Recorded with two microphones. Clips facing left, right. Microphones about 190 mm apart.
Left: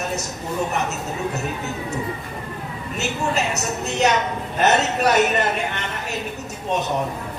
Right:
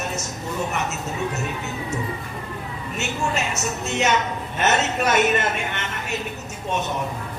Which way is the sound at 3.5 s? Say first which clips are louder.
Left 1 dB; 35° left (ahead or behind).